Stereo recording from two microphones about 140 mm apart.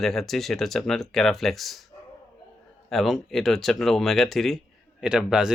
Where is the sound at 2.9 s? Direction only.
Centre (ahead or behind).